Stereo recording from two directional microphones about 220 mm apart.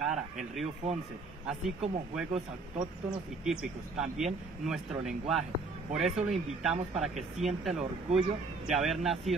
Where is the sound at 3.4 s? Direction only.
Centre (ahead or behind).